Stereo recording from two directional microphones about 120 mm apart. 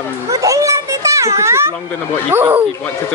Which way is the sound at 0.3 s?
25° right (ahead or behind).